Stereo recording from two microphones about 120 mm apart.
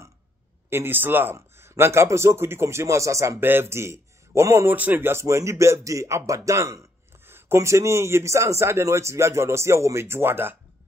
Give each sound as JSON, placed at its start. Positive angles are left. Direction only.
{"t": 0.7, "sound": "speech", "side_deg": -20}